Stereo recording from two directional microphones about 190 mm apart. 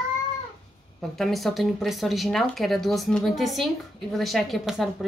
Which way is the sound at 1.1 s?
Centre (ahead or behind).